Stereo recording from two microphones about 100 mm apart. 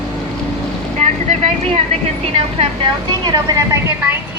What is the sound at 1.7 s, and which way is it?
Vehicle, 85° right.